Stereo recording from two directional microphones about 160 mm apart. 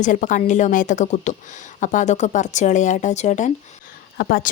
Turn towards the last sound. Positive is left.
turn(degrees=65)  # may be behind; listen again after turning